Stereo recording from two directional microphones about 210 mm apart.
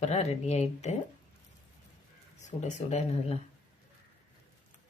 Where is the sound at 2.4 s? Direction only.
35° left (ahead or behind).